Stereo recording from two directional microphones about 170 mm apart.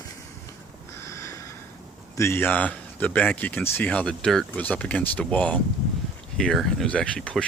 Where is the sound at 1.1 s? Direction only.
15° left (ahead or behind).